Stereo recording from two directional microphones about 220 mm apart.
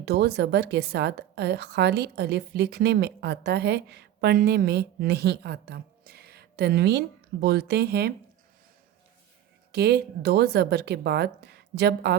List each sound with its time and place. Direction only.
0.0 s speech: 50° right (ahead or behind)
9.7 s speech: 50° right (ahead or behind)